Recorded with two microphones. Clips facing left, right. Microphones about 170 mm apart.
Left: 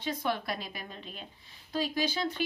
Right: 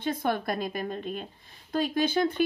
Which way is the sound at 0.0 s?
50° right (ahead or behind).